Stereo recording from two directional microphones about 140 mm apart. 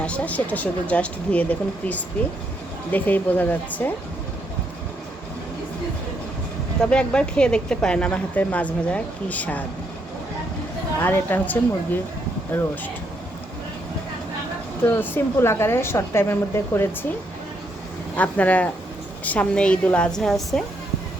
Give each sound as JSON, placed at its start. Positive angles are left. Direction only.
{"t": 0.0, "sound": "a woman's voice", "side_deg": 10}
{"t": 6.7, "sound": "a woman's voice", "side_deg": 5}
{"t": 11.0, "sound": "a woman's voice", "side_deg": 15}
{"t": 14.8, "sound": "a woman's voice", "side_deg": 15}
{"t": 18.2, "sound": "a woman's voice", "side_deg": 10}